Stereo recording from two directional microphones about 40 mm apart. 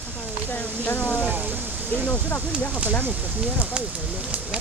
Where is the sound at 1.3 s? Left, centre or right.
Right.